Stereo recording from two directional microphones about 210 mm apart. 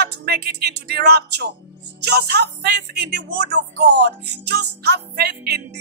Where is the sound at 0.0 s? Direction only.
50° right (ahead or behind).